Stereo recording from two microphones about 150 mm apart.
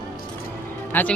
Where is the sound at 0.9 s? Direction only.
10° left (ahead or behind).